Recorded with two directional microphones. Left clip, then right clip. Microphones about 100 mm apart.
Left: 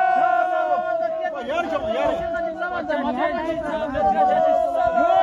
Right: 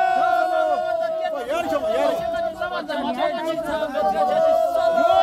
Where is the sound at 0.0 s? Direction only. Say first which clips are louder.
Left 1 dB; 30° right (ahead or behind).